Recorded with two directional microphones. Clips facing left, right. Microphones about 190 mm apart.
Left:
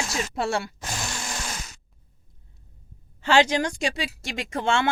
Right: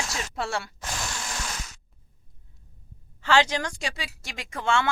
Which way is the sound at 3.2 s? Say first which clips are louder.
Left 3 dB; 15° left (ahead or behind).